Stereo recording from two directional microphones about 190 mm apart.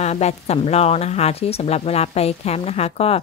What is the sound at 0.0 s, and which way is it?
Speech, 35° left (ahead or behind).